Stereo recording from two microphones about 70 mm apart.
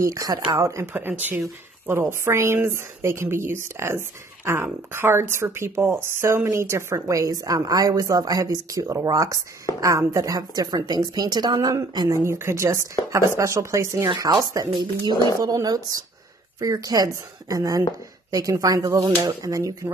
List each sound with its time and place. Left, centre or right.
0.0 s a woman's voice: right
0.9 s a woman's voice: right
10.9 s speech: right
12.1 s a woman's voice: right
14.0 s a woman's voice: right